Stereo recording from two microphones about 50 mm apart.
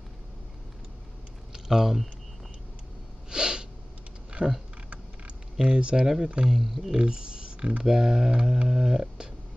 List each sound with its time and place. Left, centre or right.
1.5 s speech: centre
3.3 s sneeze: centre
4.4 s speech: right
4.8 s a sound: right
6.5 s speech: centre
6.9 s speech: centre